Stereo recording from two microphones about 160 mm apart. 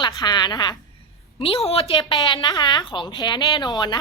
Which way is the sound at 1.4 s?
40° left (ahead or behind).